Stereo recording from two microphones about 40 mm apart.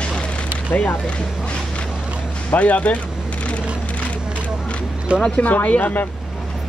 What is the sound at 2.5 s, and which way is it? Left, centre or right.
Speech, left.